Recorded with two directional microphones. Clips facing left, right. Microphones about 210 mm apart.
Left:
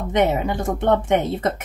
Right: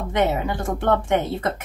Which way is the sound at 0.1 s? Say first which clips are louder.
Left 3 dB; 20° left (ahead or behind).